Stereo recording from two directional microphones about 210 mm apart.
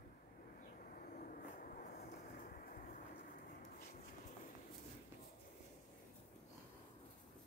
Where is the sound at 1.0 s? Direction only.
40° left (ahead or behind).